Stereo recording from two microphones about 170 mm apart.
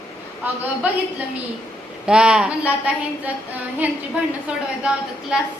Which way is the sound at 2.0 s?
5° right (ahead or behind).